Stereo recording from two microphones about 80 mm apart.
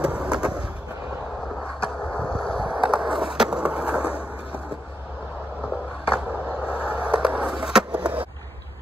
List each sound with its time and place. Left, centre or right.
0.0 s vehicle: centre
2.1 s vehicle: centre
2.7 s skateboard: centre
5.6 s a sound: centre